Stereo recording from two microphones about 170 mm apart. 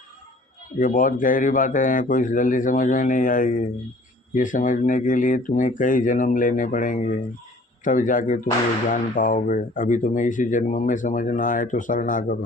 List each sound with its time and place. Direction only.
0.8 s speech: 50° left (ahead or behind)